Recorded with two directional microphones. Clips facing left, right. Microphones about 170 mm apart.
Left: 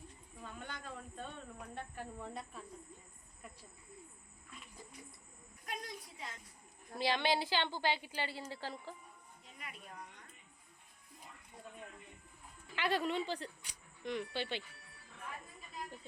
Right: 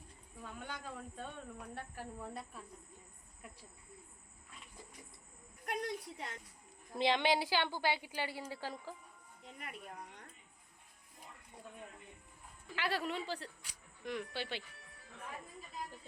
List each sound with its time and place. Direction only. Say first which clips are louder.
0.4 s speech: right 1 dB; 10° right (ahead or behind)
5.6 s a sound: right 6 dB; 65° right (ahead or behind)
6.9 s speech: right 2 dB; 20° right (ahead or behind)
9.6 s speech: right 3 dB; 55° right (ahead or behind)
12.7 s speech: left 3 dB; 5° right (ahead or behind)